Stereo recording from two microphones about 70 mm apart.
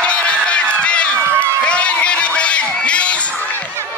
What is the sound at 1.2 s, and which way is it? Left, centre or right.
Crowd, right.